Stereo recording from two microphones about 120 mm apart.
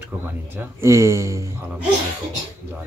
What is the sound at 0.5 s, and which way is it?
Speech, 25° right (ahead or behind).